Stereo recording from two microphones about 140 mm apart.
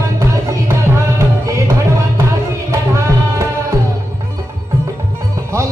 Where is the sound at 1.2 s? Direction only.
20° right (ahead or behind).